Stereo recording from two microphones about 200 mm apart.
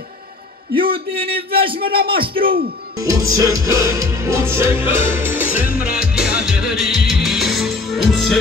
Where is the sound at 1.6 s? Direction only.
25° right (ahead or behind).